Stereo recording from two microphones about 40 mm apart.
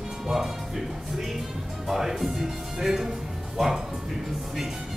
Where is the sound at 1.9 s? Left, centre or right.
Centre.